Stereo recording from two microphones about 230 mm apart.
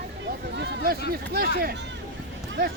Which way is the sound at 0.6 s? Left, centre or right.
Right.